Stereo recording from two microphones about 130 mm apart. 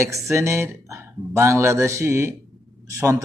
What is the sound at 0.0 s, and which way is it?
Speech, 20° right (ahead or behind).